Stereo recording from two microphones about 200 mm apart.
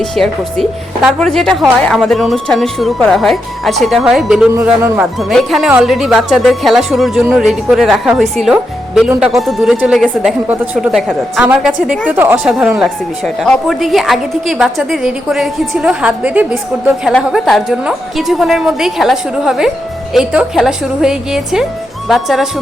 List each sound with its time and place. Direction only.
0.0 s a woman's voice: centre (ahead or behind)